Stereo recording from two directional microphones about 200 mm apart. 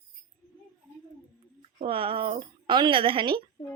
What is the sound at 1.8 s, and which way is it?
A woman's voice, 25° right (ahead or behind).